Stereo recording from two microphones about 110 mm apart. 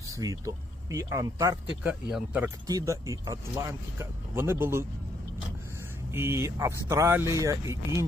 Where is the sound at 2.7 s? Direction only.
30° right (ahead or behind).